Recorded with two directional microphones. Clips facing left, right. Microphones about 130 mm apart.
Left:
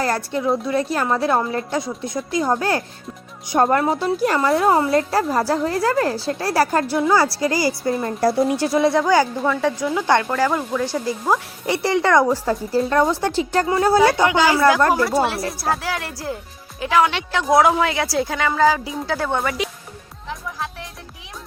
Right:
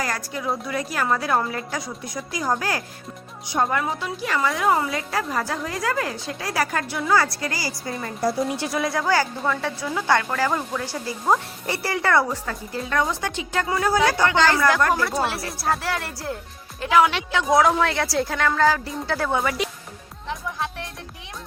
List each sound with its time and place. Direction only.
0.0 s a woman's voice: 30° left (ahead or behind)
3.5 s a woman's voice: 45° left (ahead or behind)
8.2 s speech: 75° left (ahead or behind)
8.7 s a woman's voice: 25° left (ahead or behind)
9.4 s a woman's voice: 10° left (ahead or behind)
12.3 s a woman's voice: 35° left (ahead or behind)
14.3 s speech: 10° left (ahead or behind)
14.8 s a woman's voice: 30° left (ahead or behind)
15.0 s a woman's voice: centre (ahead or behind)
20.2 s music: centre (ahead or behind)